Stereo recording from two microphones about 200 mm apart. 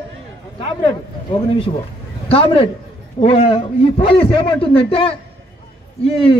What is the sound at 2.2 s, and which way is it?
A woman's voice, 25° left (ahead or behind).